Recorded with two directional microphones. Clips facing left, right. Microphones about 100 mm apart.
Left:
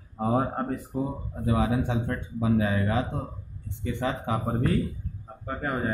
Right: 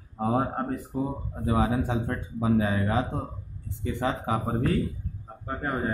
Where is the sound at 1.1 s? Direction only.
20° right (ahead or behind).